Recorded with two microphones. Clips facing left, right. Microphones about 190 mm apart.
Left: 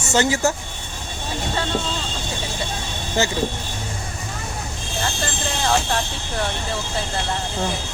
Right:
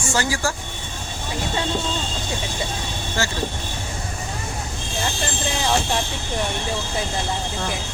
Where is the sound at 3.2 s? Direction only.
20° left (ahead or behind).